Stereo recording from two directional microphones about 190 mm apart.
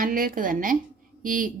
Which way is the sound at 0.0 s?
50° right (ahead or behind).